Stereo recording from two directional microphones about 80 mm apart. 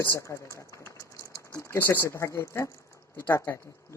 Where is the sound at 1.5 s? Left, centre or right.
Left.